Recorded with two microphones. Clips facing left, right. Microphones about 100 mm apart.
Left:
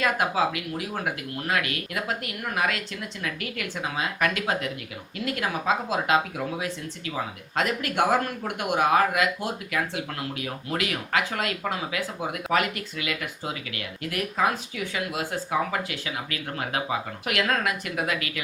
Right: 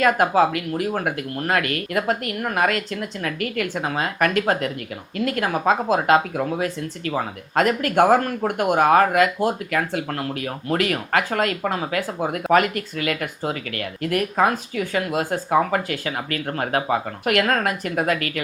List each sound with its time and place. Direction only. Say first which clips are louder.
0.0 s speech: right 7 dB; 50° right (ahead or behind)